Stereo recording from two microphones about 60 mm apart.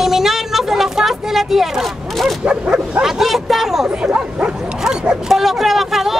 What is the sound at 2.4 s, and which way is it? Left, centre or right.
Speech, centre.